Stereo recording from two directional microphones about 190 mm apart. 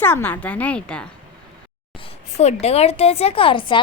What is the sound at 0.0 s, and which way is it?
A woman's voice, 10° left (ahead or behind).